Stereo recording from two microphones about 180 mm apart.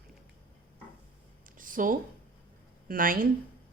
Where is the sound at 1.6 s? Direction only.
50° right (ahead or behind).